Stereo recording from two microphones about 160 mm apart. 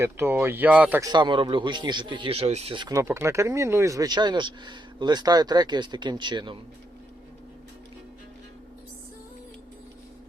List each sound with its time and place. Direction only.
0.0 s speech: 15° right (ahead or behind)
1.0 s speech: 30° right (ahead or behind)
2.9 s speech: 15° right (ahead or behind)